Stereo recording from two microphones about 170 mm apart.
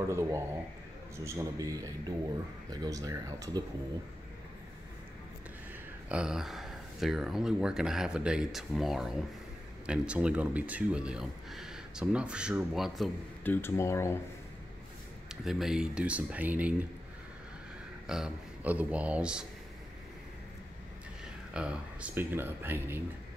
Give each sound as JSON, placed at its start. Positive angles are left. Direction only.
{"t": 0.1, "sound": "speech", "side_deg": -15}
{"t": 6.0, "sound": "speech", "side_deg": -5}
{"t": 13.4, "sound": "speech", "side_deg": 10}
{"t": 15.2, "sound": "speech", "side_deg": -5}
{"t": 18.0, "sound": "speech", "side_deg": -5}
{"t": 21.5, "sound": "speech", "side_deg": -5}